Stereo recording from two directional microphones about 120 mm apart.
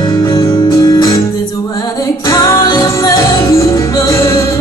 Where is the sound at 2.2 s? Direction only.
30° left (ahead or behind).